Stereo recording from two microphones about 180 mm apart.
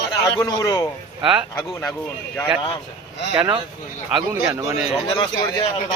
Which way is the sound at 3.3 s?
20° right (ahead or behind).